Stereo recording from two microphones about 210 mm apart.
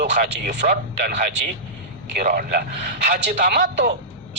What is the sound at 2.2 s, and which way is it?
Speech, 45° right (ahead or behind).